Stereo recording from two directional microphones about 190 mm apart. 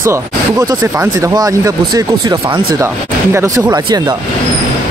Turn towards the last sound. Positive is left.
turn(degrees=-25)  # may be behind; listen again after turning